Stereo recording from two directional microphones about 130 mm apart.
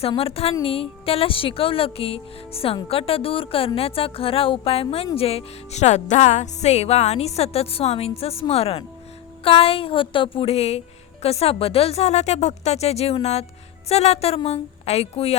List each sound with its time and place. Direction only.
0.2 s speech: 50° left (ahead or behind)